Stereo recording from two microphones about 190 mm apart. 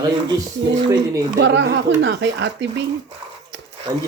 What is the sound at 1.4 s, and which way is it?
Speech, 70° right (ahead or behind).